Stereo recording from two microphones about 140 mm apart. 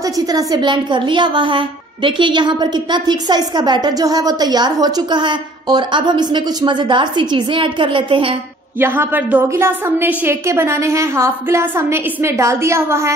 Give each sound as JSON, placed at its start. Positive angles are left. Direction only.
{"t": 0.0, "sound": "a woman's voice", "side_deg": -25}
{"t": 8.7, "sound": "a woman's voice", "side_deg": -15}